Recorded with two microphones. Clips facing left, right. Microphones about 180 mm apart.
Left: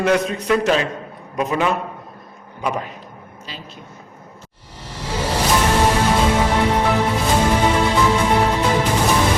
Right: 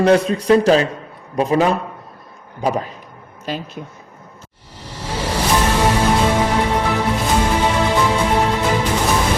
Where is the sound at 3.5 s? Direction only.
50° right (ahead or behind).